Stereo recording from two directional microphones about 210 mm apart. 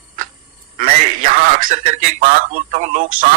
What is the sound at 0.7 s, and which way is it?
Speech, 40° right (ahead or behind).